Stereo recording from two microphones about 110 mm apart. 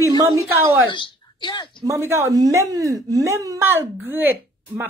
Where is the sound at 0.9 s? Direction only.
45° left (ahead or behind).